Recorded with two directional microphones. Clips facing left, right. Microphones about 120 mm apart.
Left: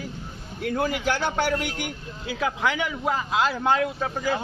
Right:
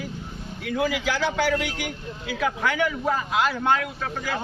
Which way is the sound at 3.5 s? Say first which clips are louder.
Left 1 dB; 30° left (ahead or behind).